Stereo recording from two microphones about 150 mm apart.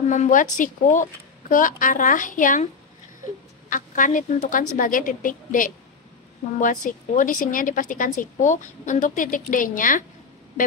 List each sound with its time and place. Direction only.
0.1 s a woman's voice: 55° left (ahead or behind)
3.7 s a woman's voice: 60° left (ahead or behind)
6.9 s a woman's voice: 60° left (ahead or behind)